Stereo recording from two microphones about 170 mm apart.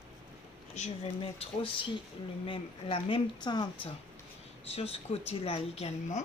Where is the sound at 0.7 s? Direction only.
40° left (ahead or behind).